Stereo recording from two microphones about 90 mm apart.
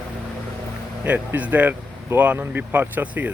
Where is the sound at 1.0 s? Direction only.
15° right (ahead or behind).